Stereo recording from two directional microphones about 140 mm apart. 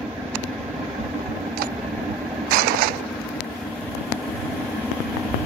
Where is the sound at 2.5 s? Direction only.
90° right.